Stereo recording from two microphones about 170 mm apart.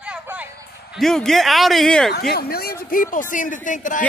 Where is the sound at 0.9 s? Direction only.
Centre (ahead or behind).